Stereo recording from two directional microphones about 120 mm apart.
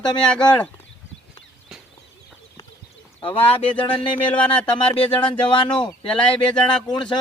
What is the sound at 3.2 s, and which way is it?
Speech, 45° left (ahead or behind).